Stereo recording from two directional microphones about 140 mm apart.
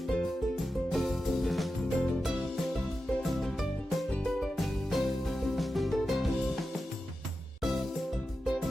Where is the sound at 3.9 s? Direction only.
Centre (ahead or behind).